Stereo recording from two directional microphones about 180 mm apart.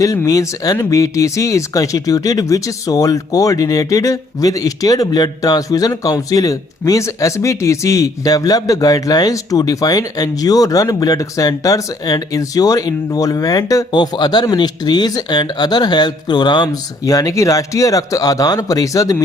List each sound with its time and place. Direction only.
0.0 s speech: 20° left (ahead or behind)